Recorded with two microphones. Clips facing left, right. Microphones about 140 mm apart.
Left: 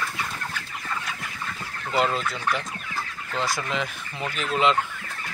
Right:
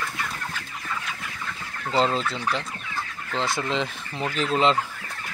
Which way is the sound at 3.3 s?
25° right (ahead or behind).